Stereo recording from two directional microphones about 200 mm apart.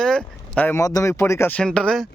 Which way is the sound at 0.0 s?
5° left (ahead or behind).